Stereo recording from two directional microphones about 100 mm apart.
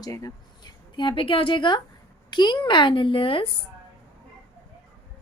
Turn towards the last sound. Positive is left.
turn(degrees=60)  # may be behind; listen again after turning